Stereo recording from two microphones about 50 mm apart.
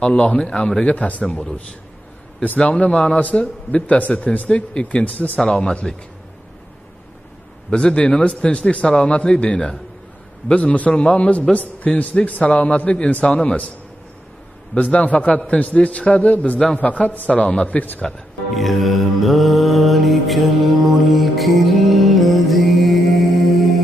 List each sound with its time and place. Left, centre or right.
0.0 s a man's voice: left
0.8 s a man's voice: left
3.3 s a man's voice: left
5.4 s a man's voice: centre
7.7 s a man's voice: centre
14.7 s a man's voice: left
18.5 s mantra: centre